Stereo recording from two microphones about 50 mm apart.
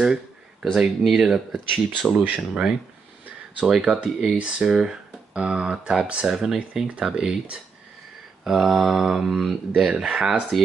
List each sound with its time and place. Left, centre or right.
0.0 s a sound: centre
0.7 s speech: centre
1.7 s speech: centre
2.4 s speech: centre
8.5 s mantra: centre
9.8 s speech: centre